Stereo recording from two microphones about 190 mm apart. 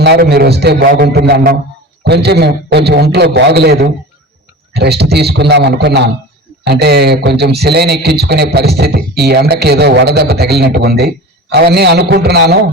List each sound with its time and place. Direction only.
0.0 s a man's voice: 60° right (ahead or behind)